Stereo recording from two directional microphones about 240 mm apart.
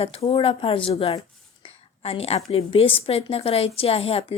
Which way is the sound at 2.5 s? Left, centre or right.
Left.